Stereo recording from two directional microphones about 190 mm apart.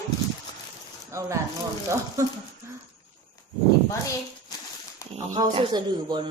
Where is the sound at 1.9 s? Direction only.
15° right (ahead or behind).